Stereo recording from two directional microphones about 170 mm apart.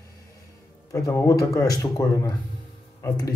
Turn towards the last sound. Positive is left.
turn(degrees=20)  # may be behind; listen again after turning